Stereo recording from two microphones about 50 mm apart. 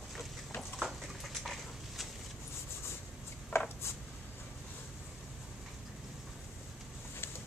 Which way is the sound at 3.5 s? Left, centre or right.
Left.